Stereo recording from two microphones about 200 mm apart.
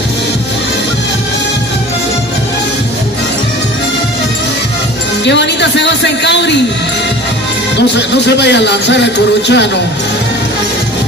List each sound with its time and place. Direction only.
5.2 s speech: 60° left (ahead or behind)
8.1 s speech: 60° left (ahead or behind)